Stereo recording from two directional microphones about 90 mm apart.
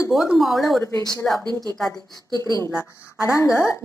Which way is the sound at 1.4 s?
50° right (ahead or behind).